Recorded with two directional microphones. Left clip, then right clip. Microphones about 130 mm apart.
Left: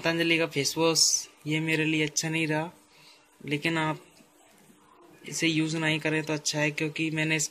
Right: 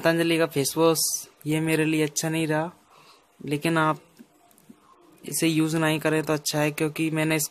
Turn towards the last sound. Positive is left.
turn(degrees=-35)  # may be behind; listen again after turning